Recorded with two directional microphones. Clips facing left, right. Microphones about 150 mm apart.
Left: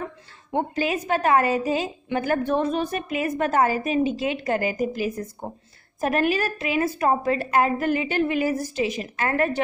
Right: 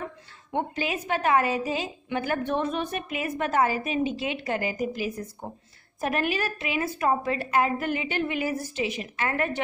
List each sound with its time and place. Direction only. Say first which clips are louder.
0.5 s a woman's voice: left 4 dB; 40° left (ahead or behind)